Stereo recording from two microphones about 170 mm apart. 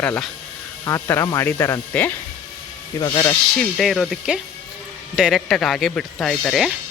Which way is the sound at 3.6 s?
Centre (ahead or behind).